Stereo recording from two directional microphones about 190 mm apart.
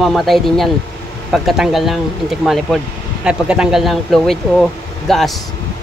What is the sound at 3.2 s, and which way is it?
Speech, 5° right (ahead or behind).